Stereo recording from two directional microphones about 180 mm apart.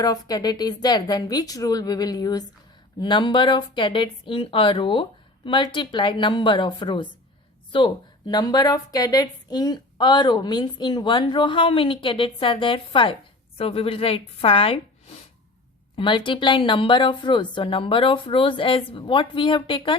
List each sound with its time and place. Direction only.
0.0 s a woman's voice: 20° left (ahead or behind)
16.0 s speech: 25° left (ahead or behind)